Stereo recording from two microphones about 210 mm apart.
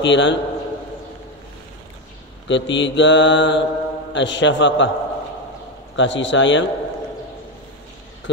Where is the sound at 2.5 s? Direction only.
60° left (ahead or behind).